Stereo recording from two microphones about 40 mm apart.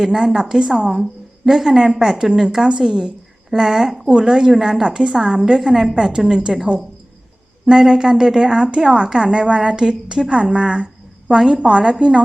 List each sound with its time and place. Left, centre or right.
0.0 s a woman's voice: centre
7.6 s a woman's voice: centre